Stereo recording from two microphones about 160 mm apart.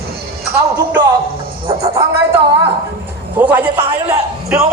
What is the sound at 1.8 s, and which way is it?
Music, 20° right (ahead or behind).